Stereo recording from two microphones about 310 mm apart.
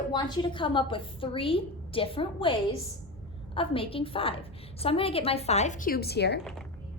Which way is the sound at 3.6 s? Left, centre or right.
Centre.